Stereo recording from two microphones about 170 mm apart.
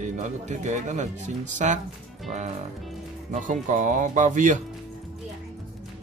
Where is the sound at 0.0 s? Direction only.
45° right (ahead or behind).